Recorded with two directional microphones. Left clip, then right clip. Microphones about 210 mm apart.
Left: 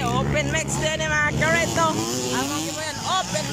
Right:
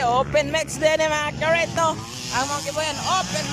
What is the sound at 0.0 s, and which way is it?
Speech, 25° right (ahead or behind).